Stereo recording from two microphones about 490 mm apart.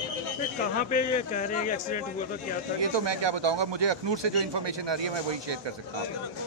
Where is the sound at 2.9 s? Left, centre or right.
Right.